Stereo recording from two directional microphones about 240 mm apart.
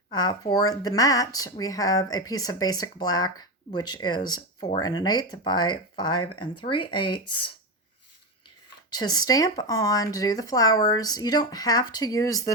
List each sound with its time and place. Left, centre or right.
0.1 s speech: centre
8.4 s speech: centre